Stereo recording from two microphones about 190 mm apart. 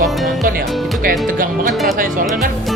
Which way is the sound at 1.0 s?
50° right (ahead or behind).